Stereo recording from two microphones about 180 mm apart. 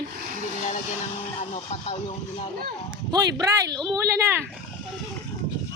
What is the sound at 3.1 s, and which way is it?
A woman's voice, 20° right (ahead or behind).